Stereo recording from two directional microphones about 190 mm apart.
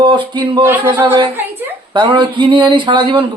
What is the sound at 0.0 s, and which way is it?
Speech, 25° right (ahead or behind).